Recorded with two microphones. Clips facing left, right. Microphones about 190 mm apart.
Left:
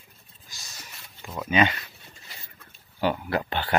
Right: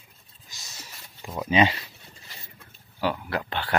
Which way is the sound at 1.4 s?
30° right (ahead or behind).